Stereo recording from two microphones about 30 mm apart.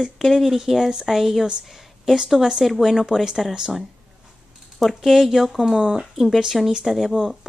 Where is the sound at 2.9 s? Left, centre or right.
Centre.